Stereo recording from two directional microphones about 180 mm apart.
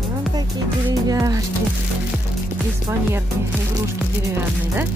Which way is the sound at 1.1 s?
20° right (ahead or behind).